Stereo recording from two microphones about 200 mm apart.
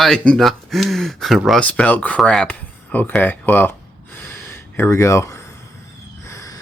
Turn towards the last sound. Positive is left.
turn(degrees=15)  # may be behind; listen again after turning